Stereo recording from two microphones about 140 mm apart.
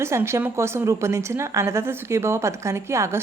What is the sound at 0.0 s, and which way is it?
A woman's voice, 20° right (ahead or behind).